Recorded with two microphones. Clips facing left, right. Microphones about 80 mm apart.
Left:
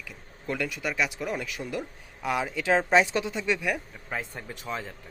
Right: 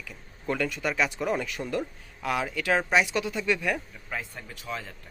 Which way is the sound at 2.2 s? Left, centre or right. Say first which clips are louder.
Left 1 dB; left.